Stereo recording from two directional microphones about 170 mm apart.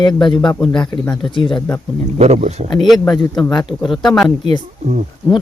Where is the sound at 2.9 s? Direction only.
Centre (ahead or behind).